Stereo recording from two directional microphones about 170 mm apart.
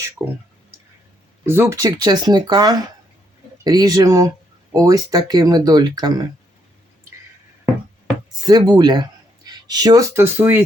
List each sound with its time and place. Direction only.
1.5 s speech: 15° right (ahead or behind)
8.4 s speech: 25° right (ahead or behind)